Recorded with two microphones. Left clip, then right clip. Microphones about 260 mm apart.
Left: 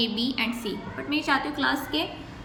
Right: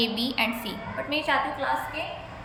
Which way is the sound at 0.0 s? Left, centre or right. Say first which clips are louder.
Right 1 dB; centre.